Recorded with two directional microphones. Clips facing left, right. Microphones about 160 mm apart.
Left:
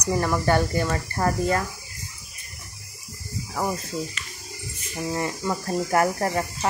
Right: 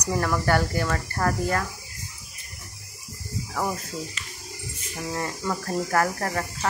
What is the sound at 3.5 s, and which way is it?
Speech, 15° left (ahead or behind).